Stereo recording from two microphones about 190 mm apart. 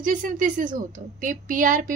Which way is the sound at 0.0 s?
45° right (ahead or behind).